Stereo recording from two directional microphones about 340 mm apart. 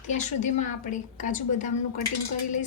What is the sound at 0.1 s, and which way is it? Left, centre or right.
A woman's voice, left.